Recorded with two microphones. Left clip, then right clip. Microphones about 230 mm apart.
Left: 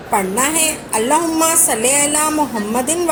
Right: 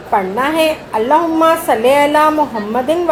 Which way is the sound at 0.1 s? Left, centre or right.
Left.